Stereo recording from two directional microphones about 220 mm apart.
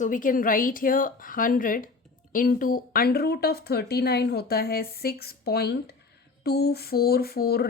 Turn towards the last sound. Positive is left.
turn(degrees=45)  # may be behind; listen again after turning